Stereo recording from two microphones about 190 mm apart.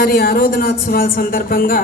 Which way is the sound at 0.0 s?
50° left (ahead or behind).